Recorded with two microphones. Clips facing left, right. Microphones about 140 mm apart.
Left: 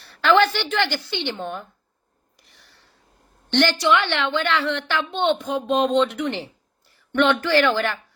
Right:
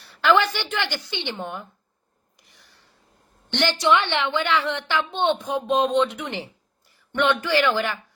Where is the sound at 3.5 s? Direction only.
15° right (ahead or behind).